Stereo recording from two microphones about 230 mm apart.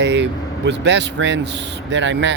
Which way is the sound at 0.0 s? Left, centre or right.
Right.